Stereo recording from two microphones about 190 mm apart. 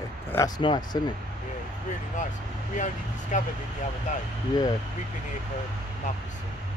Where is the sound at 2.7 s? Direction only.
40° left (ahead or behind).